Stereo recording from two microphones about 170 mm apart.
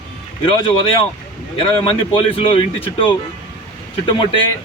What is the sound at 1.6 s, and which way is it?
Speech, 30° left (ahead or behind).